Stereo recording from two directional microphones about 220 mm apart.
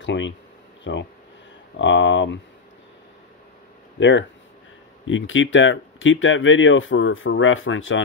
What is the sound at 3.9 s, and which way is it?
Speech, 55° left (ahead or behind).